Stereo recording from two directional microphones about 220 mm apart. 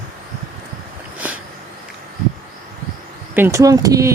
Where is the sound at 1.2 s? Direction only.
5° right (ahead or behind).